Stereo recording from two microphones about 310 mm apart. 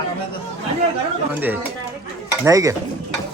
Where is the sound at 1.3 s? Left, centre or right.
Centre.